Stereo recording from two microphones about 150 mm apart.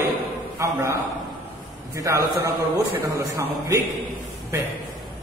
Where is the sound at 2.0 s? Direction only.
20° right (ahead or behind).